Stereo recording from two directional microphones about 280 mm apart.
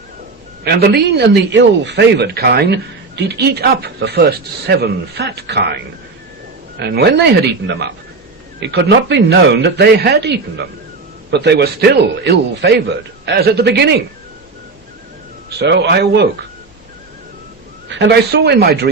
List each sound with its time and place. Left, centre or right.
0.6 s speech: right
6.7 s speech: right
15.5 s speech: right
17.8 s speech: right